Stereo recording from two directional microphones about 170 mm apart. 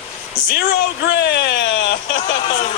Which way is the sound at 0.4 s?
65° left (ahead or behind).